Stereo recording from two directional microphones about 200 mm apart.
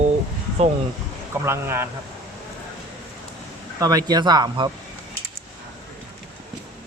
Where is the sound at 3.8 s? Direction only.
15° right (ahead or behind).